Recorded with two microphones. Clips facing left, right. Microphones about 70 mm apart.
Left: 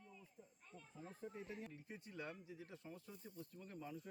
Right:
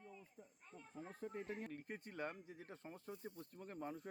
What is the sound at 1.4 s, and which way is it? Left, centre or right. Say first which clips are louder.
A man's voice: right 4 dB; right.